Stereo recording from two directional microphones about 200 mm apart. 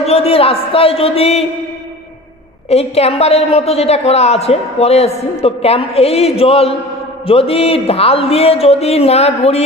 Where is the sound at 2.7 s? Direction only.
30° left (ahead or behind).